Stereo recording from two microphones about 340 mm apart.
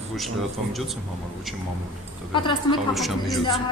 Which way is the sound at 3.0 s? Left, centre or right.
Centre.